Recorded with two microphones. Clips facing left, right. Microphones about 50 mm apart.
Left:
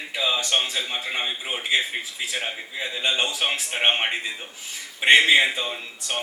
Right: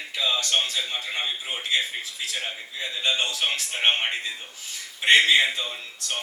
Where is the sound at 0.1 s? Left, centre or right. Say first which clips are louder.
Left 1 dB; centre.